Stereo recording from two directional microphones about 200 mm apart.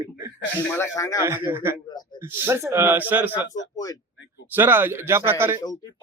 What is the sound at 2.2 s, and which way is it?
Speech, 10° right (ahead or behind).